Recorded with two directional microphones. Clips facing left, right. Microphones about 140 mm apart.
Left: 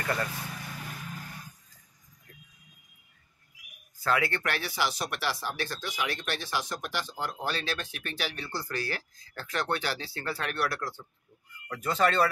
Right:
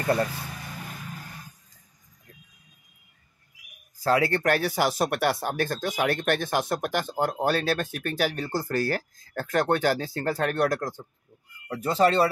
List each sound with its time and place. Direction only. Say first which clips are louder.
0.0 s speech: right 7 dB; 25° right (ahead or behind)
4.0 s speech: right 6 dB; 35° right (ahead or behind)
11.7 s speech: right 5 dB; 30° right (ahead or behind)